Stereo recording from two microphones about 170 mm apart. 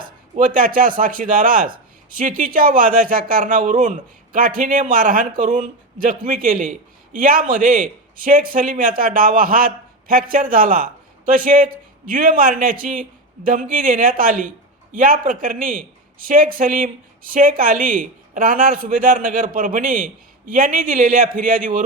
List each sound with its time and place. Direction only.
0.3 s a man's voice: 55° right (ahead or behind)